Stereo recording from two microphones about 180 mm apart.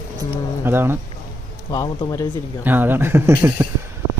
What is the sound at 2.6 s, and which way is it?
Speech, 10° right (ahead or behind).